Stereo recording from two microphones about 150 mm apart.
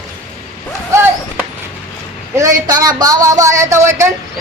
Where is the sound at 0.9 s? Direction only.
15° right (ahead or behind).